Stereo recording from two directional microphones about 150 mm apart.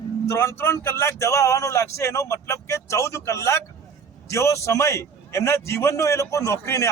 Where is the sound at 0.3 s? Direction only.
15° left (ahead or behind).